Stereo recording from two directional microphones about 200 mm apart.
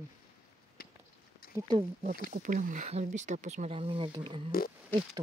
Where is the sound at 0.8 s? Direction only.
50° left (ahead or behind).